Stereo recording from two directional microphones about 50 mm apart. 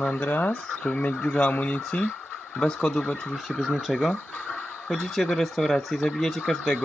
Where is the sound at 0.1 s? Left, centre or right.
Left.